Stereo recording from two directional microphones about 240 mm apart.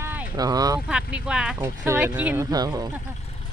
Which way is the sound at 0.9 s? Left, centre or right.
Centre.